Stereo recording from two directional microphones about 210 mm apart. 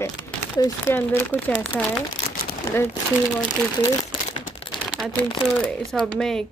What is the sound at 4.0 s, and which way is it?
Crumpling, 30° left (ahead or behind).